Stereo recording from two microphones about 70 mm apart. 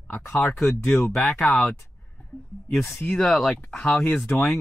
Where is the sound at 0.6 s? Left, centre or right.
Centre.